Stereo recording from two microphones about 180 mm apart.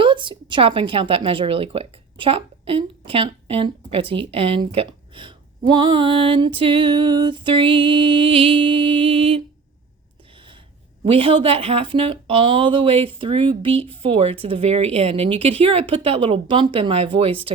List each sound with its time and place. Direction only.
0.0 s a woman's voice: 25° right (ahead or behind)
10.3 s a sound: 30° right (ahead or behind)
11.0 s speech: 30° right (ahead or behind)